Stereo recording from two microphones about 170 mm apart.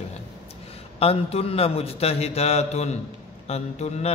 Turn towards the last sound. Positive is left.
turn(degrees=40)  # may be behind; listen again after turning